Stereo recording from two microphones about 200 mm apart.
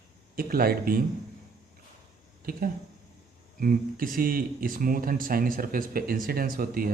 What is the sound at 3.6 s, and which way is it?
Speech, 45° right (ahead or behind).